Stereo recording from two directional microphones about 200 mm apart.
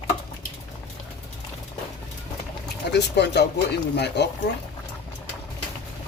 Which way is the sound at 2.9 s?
55° left (ahead or behind).